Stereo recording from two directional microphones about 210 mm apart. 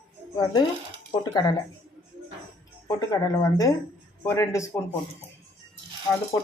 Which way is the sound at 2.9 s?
15° left (ahead or behind).